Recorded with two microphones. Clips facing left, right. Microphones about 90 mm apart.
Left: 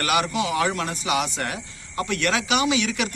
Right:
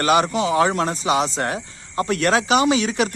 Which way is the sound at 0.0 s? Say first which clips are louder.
Right 5 dB; 30° right (ahead or behind).